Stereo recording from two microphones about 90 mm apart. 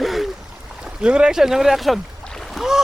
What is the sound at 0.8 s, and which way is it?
Speech, 10° right (ahead or behind).